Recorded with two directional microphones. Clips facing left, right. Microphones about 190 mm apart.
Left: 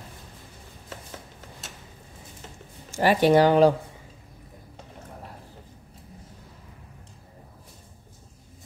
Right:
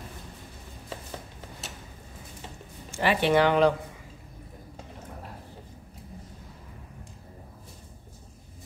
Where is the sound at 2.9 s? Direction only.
40° left (ahead or behind).